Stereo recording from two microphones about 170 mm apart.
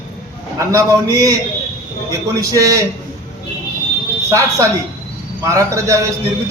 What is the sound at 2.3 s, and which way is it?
Speech, 20° right (ahead or behind).